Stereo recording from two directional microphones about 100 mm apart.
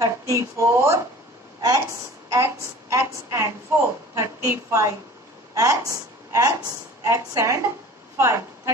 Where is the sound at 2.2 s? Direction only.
30° right (ahead or behind).